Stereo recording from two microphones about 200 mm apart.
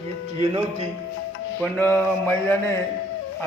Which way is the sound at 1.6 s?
10° left (ahead or behind).